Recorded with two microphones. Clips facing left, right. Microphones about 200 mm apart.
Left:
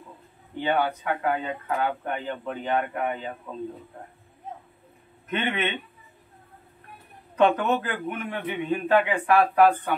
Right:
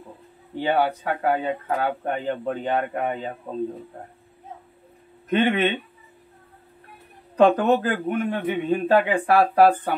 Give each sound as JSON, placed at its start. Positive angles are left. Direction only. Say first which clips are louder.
{"t": 0.6, "sound": "speech", "louder": "right 3 dB", "side_deg": -30}
{"t": 5.3, "sound": "speech", "louder": "right 7 dB", "side_deg": -35}
{"t": 7.3, "sound": "speech", "louder": "right 4 dB", "side_deg": -35}